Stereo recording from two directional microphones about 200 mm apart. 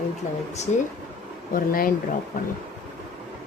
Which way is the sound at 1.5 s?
45° left (ahead or behind).